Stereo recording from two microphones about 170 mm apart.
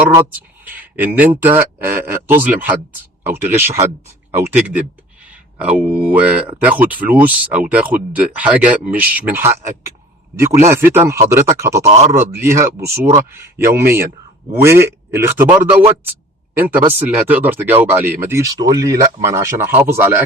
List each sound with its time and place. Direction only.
0.0 s speech: 15° right (ahead or behind)
11.9 s a man's voice: 40° right (ahead or behind)
12.1 s speech: 15° right (ahead or behind)